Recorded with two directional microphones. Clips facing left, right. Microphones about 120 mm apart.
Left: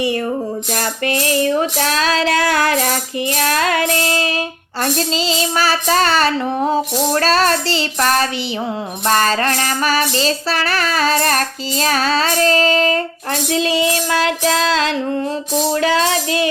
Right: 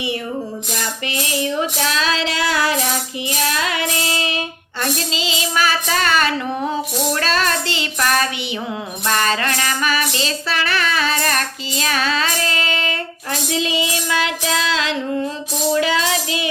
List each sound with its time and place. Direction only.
0.7 s child singing: 50° left (ahead or behind)
3.2 s music: 50° left (ahead or behind)
15.7 s child singing: 40° left (ahead or behind)